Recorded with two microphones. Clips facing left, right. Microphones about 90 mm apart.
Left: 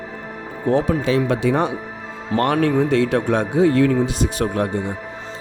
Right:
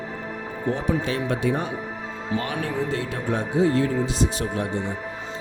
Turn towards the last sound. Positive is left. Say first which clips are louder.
# left 4 dB
turn(degrees=55)  # may be behind; listen again after turning